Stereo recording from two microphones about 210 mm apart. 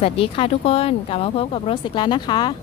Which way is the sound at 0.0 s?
25° left (ahead or behind).